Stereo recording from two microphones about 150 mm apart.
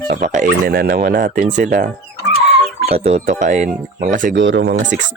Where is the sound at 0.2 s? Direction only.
55° right (ahead or behind).